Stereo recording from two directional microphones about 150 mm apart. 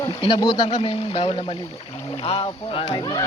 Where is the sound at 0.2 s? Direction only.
40° left (ahead or behind).